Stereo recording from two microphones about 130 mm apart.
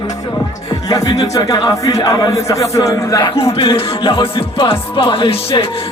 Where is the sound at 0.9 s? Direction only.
30° left (ahead or behind).